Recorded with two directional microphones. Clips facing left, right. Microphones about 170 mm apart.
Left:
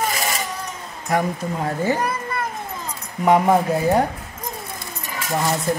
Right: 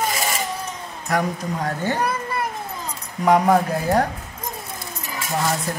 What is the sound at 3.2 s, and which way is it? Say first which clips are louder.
Speech: even; 10° left (ahead or behind).